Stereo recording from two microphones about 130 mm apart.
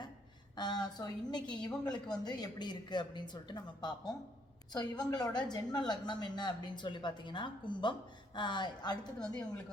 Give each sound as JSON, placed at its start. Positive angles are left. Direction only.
{"t": 0.5, "sound": "a woman's voice", "side_deg": 35}
{"t": 1.9, "sound": "speech", "side_deg": 5}
{"t": 2.2, "sound": "a woman's voice", "side_deg": 35}
{"t": 9.1, "sound": "a woman's voice", "side_deg": 5}